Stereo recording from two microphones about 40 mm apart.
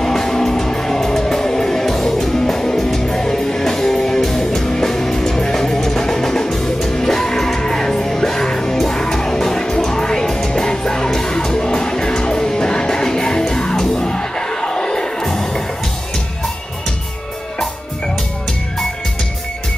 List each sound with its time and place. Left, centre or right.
0.0 s music: centre